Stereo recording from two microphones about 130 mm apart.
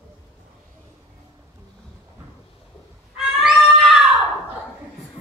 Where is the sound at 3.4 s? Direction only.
Centre (ahead or behind).